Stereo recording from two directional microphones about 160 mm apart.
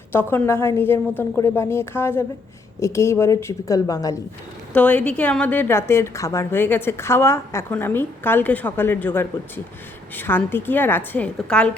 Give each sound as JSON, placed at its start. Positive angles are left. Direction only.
{"t": 0.1, "sound": "a woman's voice", "side_deg": 15}
{"t": 4.7, "sound": "a woman's voice", "side_deg": 10}